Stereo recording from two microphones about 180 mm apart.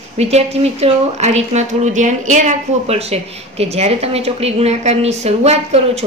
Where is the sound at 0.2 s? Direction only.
35° right (ahead or behind).